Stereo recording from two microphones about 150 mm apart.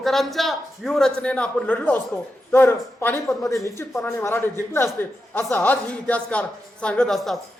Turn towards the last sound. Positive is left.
turn(degrees=0)  # may be behind; listen again after turning